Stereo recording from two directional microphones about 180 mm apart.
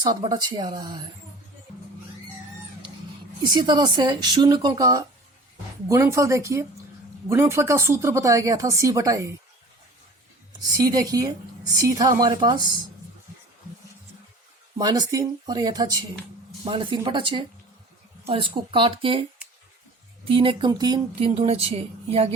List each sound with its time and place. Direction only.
0.0 s speech: 20° right (ahead or behind)
3.4 s speech: 25° right (ahead or behind)
10.8 s speech: 20° right (ahead or behind)
14.8 s speech: 20° right (ahead or behind)
20.2 s speech: 30° right (ahead or behind)
21.2 s speech: 35° right (ahead or behind)